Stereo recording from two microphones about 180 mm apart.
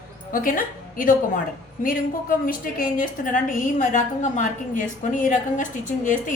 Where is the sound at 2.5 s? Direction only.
50° left (ahead or behind).